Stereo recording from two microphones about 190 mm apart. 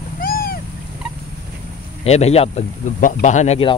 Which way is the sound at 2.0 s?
35° left (ahead or behind).